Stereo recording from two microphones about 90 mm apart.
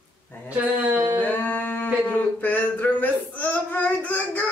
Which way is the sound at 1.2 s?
15° left (ahead or behind).